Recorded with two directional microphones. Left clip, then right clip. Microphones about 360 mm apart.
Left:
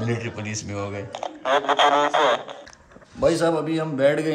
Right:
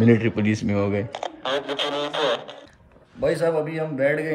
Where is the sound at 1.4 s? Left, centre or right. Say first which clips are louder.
Left 8 dB; centre.